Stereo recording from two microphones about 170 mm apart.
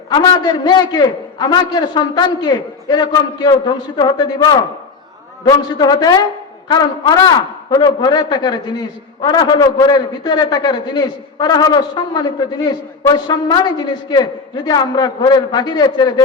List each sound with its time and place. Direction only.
0.1 s a man's voice: 25° left (ahead or behind)